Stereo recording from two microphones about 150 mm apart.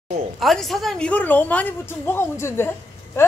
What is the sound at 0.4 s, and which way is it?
A woman's voice, centre (ahead or behind).